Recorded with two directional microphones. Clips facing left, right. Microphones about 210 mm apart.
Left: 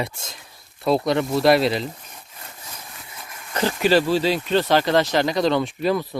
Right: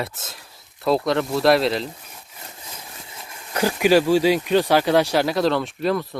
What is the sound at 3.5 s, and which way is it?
Speech, 10° right (ahead or behind).